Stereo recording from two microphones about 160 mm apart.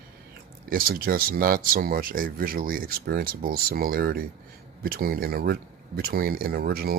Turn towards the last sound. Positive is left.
turn(degrees=-70)  # may be behind; listen again after turning